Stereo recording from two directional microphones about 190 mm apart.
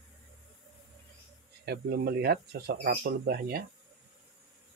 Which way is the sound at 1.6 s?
55° right (ahead or behind).